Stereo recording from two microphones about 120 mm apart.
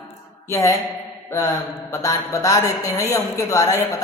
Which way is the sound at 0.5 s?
25° left (ahead or behind).